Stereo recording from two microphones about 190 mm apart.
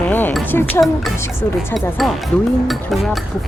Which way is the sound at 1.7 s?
Centre (ahead or behind).